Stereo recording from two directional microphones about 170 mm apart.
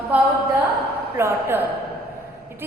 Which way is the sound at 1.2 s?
15° right (ahead or behind).